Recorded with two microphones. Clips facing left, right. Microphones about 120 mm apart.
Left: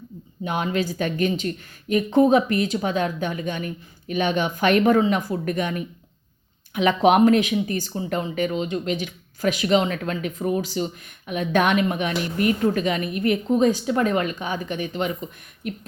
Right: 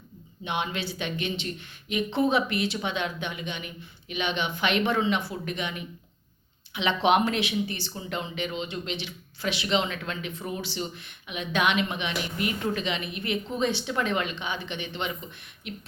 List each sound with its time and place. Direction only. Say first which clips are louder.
0.4 s speech: left 6 dB; 40° left (ahead or behind)